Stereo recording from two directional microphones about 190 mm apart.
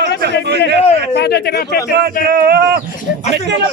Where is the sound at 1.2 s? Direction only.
60° left (ahead or behind).